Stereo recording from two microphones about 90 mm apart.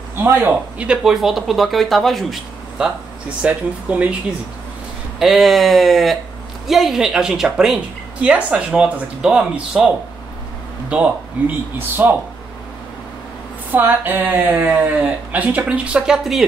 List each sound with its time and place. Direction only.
0.2 s a man's voice: 25° right (ahead or behind)
0.8 s speech: 5° right (ahead or behind)
3.4 s a woman's voice: 15° right (ahead or behind)
5.2 s a woman's voice: centre (ahead or behind)
10.9 s a man's voice: 15° right (ahead or behind)
13.7 s a woman's voice: 20° right (ahead or behind)